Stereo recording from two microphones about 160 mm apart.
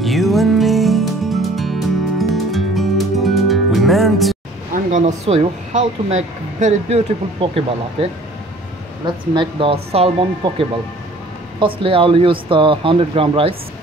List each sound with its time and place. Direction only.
0.0 s music: centre (ahead or behind)
4.9 s speech: 45° right (ahead or behind)
11.6 s speech: 35° right (ahead or behind)